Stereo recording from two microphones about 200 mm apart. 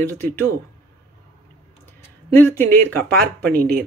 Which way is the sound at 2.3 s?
10° left (ahead or behind).